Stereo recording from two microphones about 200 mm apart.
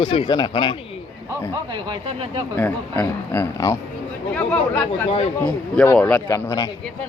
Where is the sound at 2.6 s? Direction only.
10° left (ahead or behind).